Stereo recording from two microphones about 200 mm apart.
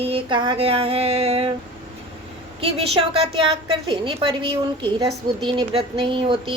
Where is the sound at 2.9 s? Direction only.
30° right (ahead or behind).